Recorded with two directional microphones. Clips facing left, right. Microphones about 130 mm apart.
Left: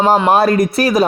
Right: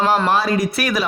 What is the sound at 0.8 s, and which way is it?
Speech, 35° left (ahead or behind).